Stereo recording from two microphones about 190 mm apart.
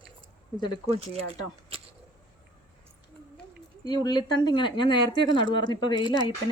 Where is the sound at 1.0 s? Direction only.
30° right (ahead or behind).